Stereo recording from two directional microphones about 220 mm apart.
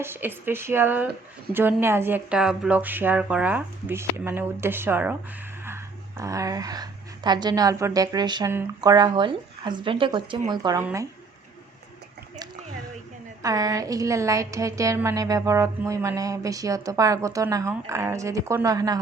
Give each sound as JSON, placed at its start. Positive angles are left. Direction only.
{"t": 0.0, "sound": "a woman's voice", "side_deg": -10}
{"t": 5.6, "sound": "a sound", "side_deg": -10}
{"t": 7.3, "sound": "a woman's voice", "side_deg": -20}
{"t": 13.4, "sound": "a woman's voice", "side_deg": -15}